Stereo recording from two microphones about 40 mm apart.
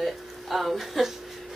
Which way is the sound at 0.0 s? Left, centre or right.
Centre.